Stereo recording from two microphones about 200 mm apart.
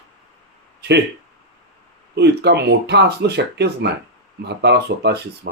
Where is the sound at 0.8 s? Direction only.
55° right (ahead or behind).